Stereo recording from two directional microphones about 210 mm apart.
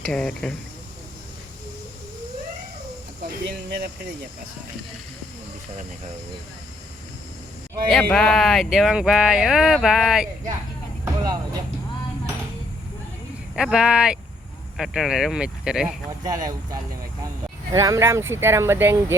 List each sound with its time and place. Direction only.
0.0 s speech: 5° left (ahead or behind)
3.4 s speech: 50° right (ahead or behind)
7.9 s speech: centre (ahead or behind)
11.0 s vehicle: 15° right (ahead or behind)
13.6 s speech: 5° right (ahead or behind)
16.0 s speech: 15° right (ahead or behind)